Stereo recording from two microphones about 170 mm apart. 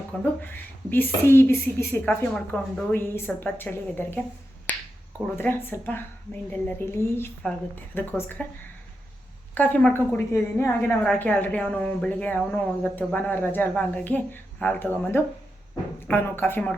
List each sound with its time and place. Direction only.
0.1 s a woman's voice: 5° left (ahead or behind)
4.7 s finger snapping: 10° left (ahead or behind)
5.4 s a woman's voice: 15° left (ahead or behind)
9.6 s a woman's voice: 10° left (ahead or behind)